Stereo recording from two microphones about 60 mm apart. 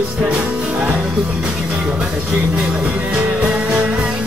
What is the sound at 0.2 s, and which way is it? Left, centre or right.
Music, right.